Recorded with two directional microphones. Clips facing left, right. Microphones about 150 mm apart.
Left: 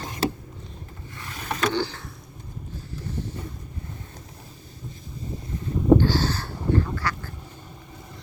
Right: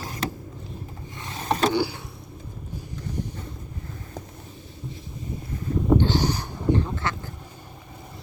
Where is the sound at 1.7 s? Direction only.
10° right (ahead or behind).